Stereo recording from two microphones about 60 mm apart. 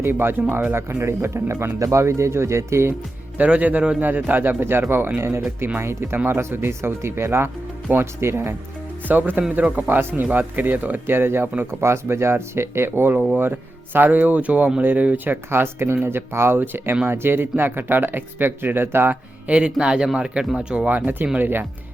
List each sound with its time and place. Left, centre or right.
0.1 s speech: right
3.3 s speech: right
5.8 s speech: right
7.9 s speech: right
8.2 s speech: right
9.0 s speech: right
19.5 s speech: centre